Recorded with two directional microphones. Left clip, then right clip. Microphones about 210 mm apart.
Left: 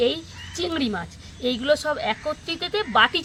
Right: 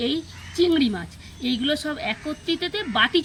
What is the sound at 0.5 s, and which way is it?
A woman's voice, 50° left (ahead or behind).